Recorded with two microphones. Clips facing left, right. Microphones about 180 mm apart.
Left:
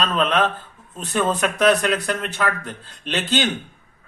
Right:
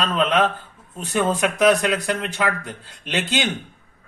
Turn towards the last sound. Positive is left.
turn(degrees=-15)  # may be behind; listen again after turning